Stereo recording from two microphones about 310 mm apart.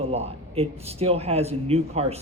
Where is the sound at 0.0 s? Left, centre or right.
Centre.